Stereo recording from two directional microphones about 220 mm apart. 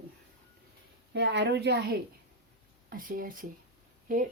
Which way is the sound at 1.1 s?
55° right (ahead or behind).